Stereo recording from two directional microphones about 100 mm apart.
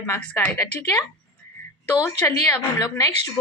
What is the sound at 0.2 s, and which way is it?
Speech, 15° left (ahead or behind).